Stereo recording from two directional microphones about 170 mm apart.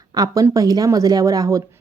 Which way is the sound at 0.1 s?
20° right (ahead or behind).